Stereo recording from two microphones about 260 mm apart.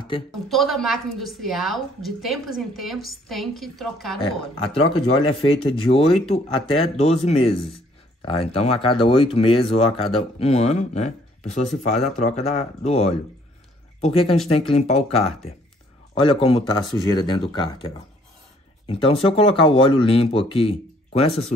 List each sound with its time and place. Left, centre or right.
0.5 s a woman's voice: centre
4.7 s speech: left